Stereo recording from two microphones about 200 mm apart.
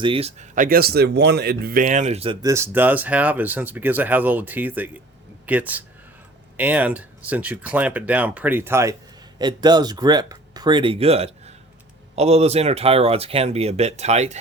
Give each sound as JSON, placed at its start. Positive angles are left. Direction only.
{"t": 0.0, "sound": "speech", "side_deg": -30}